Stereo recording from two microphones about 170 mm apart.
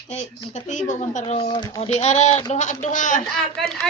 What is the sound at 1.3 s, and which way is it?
Speech, 25° left (ahead or behind).